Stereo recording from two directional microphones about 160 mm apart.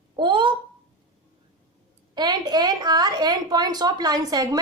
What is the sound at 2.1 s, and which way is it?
A woman's voice, 25° right (ahead or behind).